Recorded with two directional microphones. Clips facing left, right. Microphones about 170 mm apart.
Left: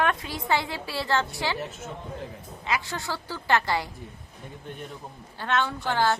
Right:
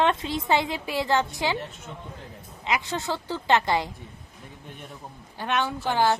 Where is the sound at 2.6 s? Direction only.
20° right (ahead or behind).